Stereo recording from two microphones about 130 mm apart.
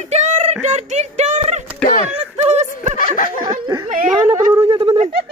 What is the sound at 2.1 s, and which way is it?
Snicker, 55° right (ahead or behind).